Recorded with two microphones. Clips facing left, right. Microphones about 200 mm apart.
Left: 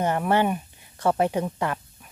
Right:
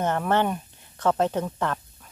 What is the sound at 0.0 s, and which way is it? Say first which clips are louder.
Speech: left 1 dB; 10° left (ahead or behind).